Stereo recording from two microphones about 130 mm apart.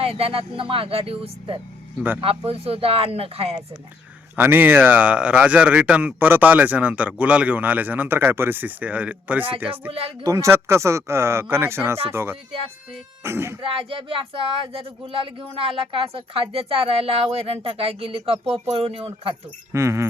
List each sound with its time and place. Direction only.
0.0 s speech: 50° right (ahead or behind)
4.4 s a man's voice: 15° right (ahead or behind)
9.9 s speech: 50° right (ahead or behind)
10.2 s speech: 25° right (ahead or behind)
13.6 s speech: 40° right (ahead or behind)
19.7 s speech: 20° right (ahead or behind)